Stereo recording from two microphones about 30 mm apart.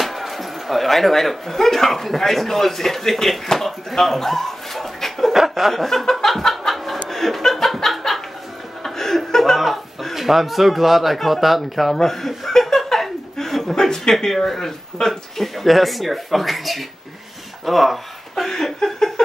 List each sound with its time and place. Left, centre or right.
0.0 s speech: centre
5.3 s speech: centre
6.7 s chuckle: centre
9.4 s speech: centre
12.3 s chuckle: centre
13.7 s speech: centre
18.4 s chuckle: centre
18.9 s a sound: centre